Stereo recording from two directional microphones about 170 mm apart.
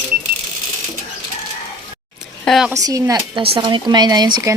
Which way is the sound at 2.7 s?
20° right (ahead or behind).